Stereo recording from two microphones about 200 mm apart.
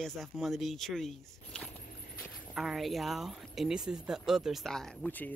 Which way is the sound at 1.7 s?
40° left (ahead or behind).